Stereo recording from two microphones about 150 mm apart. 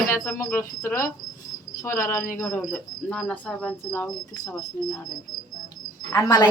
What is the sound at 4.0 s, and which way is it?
Speech, 25° left (ahead or behind).